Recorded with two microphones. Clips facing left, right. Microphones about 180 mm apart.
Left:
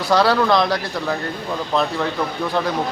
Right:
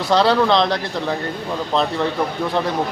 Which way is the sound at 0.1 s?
25° right (ahead or behind).